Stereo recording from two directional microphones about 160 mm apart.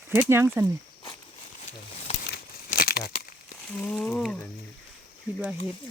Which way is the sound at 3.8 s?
5° left (ahead or behind).